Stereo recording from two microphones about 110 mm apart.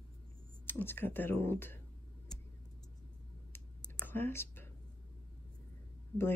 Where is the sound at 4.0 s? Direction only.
20° left (ahead or behind).